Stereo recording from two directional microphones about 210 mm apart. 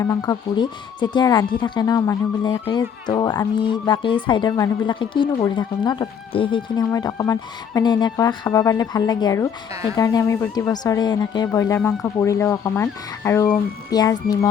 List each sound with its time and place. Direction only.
0.0 s speech: 15° left (ahead or behind)